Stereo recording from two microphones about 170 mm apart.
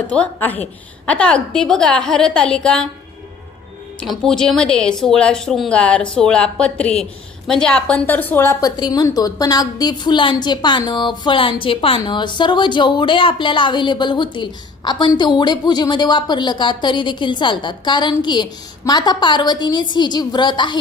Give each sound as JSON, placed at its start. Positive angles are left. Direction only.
{"t": 0.1, "sound": "a woman's voice", "side_deg": 10}
{"t": 4.0, "sound": "a woman's voice", "side_deg": 0}
{"t": 8.7, "sound": "a woman's voice", "side_deg": 25}